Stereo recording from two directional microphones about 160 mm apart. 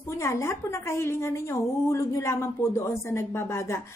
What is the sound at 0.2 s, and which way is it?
Speech, 15° left (ahead or behind).